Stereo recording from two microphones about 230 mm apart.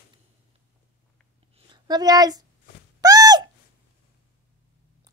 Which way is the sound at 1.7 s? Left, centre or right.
Centre.